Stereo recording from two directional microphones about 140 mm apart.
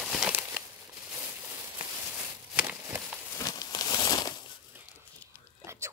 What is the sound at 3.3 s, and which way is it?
Crumpling, 25° left (ahead or behind).